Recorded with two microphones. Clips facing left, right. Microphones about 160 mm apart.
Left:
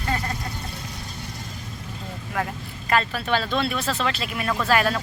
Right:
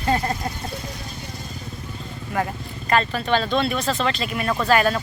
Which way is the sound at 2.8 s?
5° left (ahead or behind).